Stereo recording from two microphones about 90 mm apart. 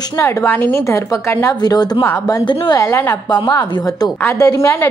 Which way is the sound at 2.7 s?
35° left (ahead or behind).